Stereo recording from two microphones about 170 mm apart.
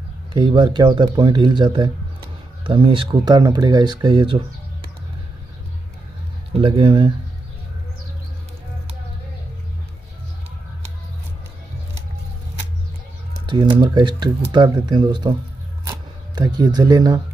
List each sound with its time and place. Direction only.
0.3 s speech: 30° right (ahead or behind)
6.6 s speech: 35° right (ahead or behind)
13.5 s speech: 25° right (ahead or behind)
16.3 s speech: 25° right (ahead or behind)